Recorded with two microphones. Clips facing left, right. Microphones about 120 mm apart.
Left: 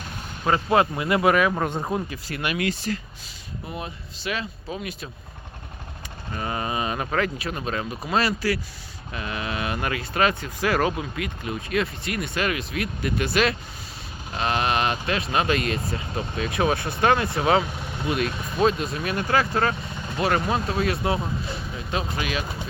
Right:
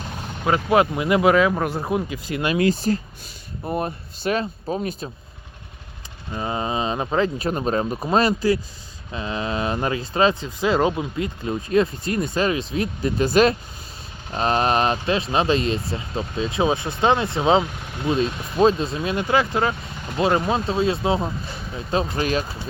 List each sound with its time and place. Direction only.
0.4 s speech: 15° right (ahead or behind); by 5.0 s 40° right (ahead or behind)
6.3 s speech: 20° right (ahead or behind)
7.4 s speech: 35° right (ahead or behind)
21.8 s speech: 35° right (ahead or behind)